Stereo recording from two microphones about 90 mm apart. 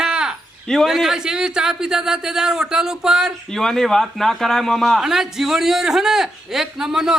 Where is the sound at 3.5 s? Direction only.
5° left (ahead or behind).